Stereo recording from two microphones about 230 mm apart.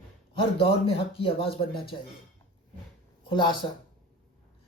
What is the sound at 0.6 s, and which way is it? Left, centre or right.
Speech, left.